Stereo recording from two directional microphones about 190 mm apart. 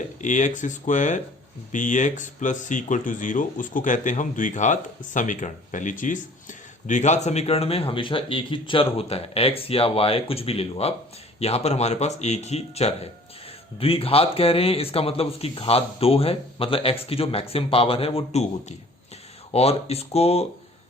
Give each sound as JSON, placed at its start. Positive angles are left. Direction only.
{"t": 0.2, "sound": "speech", "side_deg": 40}
{"t": 19.5, "sound": "speech", "side_deg": 35}